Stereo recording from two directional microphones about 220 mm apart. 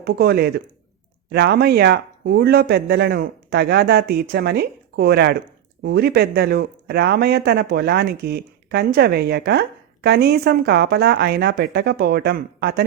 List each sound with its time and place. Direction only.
0.0 s speech: 45° right (ahead or behind)